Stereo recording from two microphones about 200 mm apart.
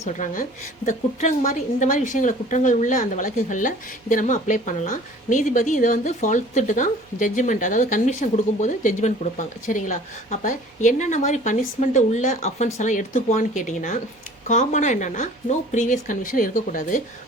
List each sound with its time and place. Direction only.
0.0 s a woman's voice: 40° left (ahead or behind)